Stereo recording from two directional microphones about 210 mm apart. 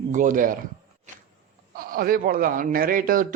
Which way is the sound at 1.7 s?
45° right (ahead or behind).